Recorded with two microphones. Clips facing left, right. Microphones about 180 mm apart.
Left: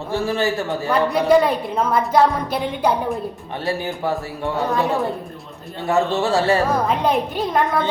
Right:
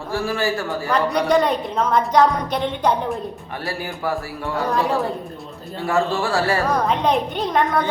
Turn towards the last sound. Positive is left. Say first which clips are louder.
# even
turn(degrees=0)  # may be behind; listen again after turning